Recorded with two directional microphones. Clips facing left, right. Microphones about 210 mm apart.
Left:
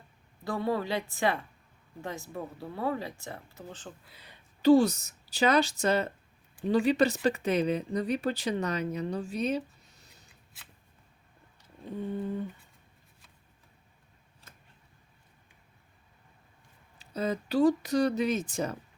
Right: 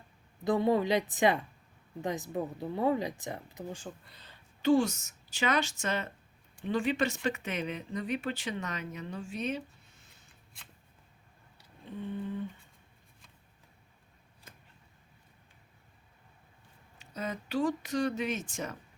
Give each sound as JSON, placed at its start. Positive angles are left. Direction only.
{"t": 0.4, "sound": "speech", "side_deg": -20}
{"t": 4.0, "sound": "speech", "side_deg": 10}
{"t": 4.6, "sound": "speech", "side_deg": 35}
{"t": 10.5, "sound": "shuffling cards", "side_deg": 5}
{"t": 12.1, "sound": "speech", "side_deg": 40}
{"t": 17.0, "sound": "speech", "side_deg": 35}